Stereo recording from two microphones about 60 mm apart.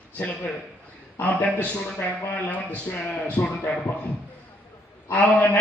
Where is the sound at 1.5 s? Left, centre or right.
Left.